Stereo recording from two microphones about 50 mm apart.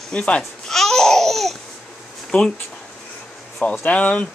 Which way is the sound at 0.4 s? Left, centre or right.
Centre.